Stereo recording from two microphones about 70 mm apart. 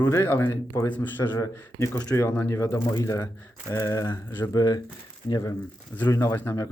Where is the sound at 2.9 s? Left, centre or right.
Left.